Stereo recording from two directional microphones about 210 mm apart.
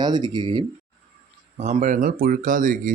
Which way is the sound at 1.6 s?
35° right (ahead or behind).